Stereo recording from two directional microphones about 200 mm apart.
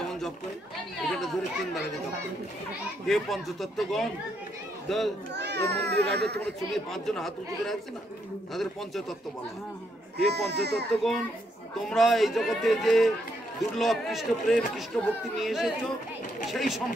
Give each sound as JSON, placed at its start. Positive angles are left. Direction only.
{"t": 1.1, "sound": "a man's voice", "side_deg": 0}
{"t": 3.1, "sound": "a man's voice", "side_deg": 0}
{"t": 5.3, "sound": "a child's voice", "side_deg": -60}
{"t": 6.9, "sound": "a man's voice", "side_deg": 0}
{"t": 10.1, "sound": "a child's voice", "side_deg": -55}
{"t": 10.9, "sound": "a man's voice", "side_deg": 0}